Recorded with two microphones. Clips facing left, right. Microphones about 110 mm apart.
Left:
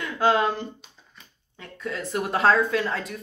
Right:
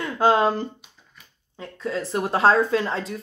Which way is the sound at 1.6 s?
30° right (ahead or behind).